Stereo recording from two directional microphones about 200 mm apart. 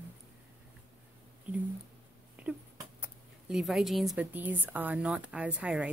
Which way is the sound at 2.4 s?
5° right (ahead or behind).